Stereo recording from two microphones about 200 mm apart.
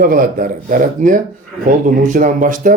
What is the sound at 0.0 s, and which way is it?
Speech, 45° right (ahead or behind).